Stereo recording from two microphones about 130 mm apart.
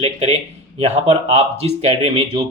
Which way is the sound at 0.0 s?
55° right (ahead or behind).